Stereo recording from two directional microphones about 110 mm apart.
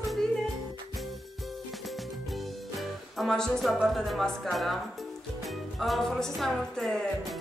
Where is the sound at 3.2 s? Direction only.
5° left (ahead or behind).